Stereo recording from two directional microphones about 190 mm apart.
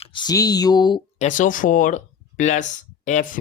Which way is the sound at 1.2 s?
40° left (ahead or behind).